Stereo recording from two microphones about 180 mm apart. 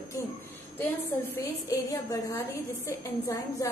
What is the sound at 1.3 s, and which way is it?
A woman's voice, 20° left (ahead or behind).